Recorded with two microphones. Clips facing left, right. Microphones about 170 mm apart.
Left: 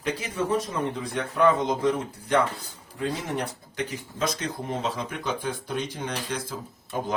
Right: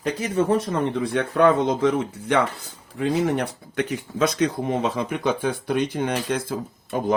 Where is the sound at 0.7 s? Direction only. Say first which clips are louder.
Right 6 dB; 65° right (ahead or behind).